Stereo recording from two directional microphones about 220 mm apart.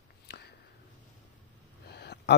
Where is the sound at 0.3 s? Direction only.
50° left (ahead or behind).